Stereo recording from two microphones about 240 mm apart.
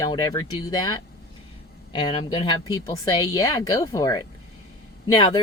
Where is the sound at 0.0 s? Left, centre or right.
Centre.